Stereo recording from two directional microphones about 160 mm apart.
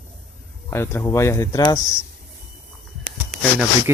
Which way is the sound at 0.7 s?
15° left (ahead or behind).